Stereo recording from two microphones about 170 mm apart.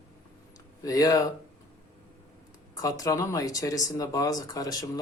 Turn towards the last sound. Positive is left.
turn(degrees=20)  # may be behind; listen again after turning